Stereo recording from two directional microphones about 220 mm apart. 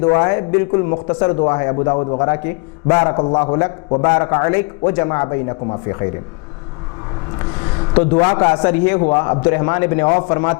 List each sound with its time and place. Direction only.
0.1 s a man's voice: 20° left (ahead or behind)
8.1 s a man's voice: 20° left (ahead or behind)
8.6 s a man's voice: 10° left (ahead or behind)